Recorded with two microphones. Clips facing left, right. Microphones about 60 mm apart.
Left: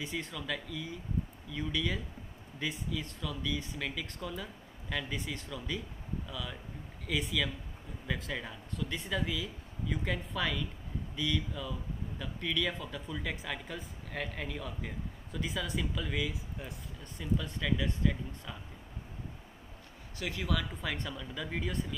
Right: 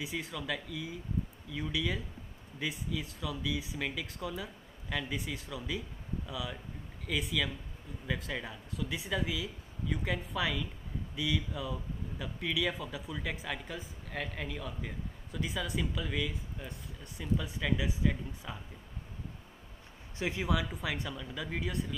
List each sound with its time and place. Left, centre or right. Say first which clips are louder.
0.0 s speech: even; centre
20.2 s speech: right 2 dB; right
20.7 s speech: right 1 dB; centre